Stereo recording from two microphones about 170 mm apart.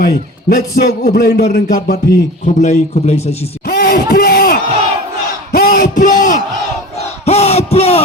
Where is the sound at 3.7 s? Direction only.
60° left (ahead or behind).